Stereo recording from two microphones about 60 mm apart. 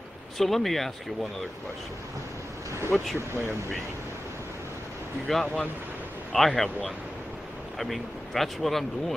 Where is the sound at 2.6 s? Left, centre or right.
Right.